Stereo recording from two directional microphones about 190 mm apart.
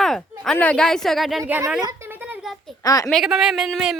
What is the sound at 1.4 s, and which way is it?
Speech, 10° right (ahead or behind).